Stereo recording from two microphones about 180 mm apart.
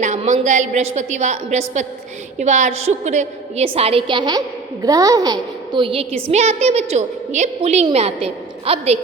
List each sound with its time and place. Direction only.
0.0 s a woman's voice: 40° right (ahead or behind)